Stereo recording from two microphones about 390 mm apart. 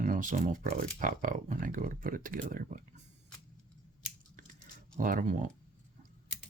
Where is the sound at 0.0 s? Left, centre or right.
Centre.